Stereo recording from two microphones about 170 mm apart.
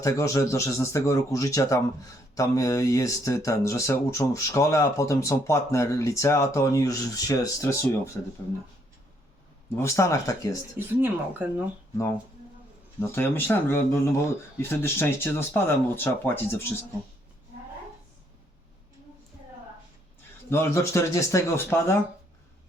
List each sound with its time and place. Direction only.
0.0 s a man's voice: 20° left (ahead or behind)
9.7 s speech: 15° left (ahead or behind)
10.8 s speech: 10° right (ahead or behind)
13.0 s a man's voice: 15° left (ahead or behind)
20.5 s a man's voice: 15° left (ahead or behind)